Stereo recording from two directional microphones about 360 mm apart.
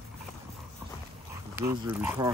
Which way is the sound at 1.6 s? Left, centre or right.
Centre.